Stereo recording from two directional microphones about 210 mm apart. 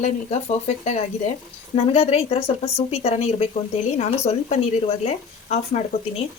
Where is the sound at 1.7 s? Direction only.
30° left (ahead or behind).